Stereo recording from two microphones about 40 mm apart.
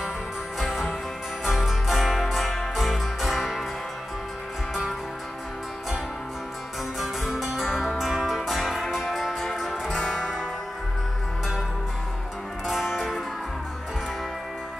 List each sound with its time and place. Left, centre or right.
0.6 s music: centre
7.0 s music: centre
9.8 s music: left
12.6 s music: centre